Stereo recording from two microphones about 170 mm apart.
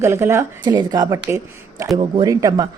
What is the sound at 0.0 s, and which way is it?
Speech, 15° right (ahead or behind).